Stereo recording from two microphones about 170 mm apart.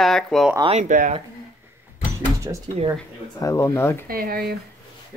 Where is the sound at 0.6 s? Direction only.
40° right (ahead or behind).